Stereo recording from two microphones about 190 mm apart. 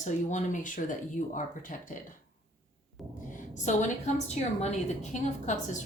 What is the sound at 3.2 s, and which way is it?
Speech, 45° left (ahead or behind).